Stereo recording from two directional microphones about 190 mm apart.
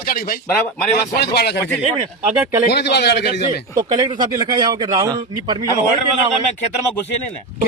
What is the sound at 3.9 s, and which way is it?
A man's voice, 20° right (ahead or behind).